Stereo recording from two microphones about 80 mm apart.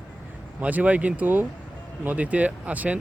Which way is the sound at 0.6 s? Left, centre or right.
Centre.